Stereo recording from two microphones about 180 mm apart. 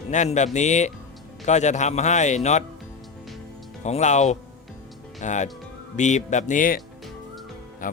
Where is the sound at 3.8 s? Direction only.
40° left (ahead or behind).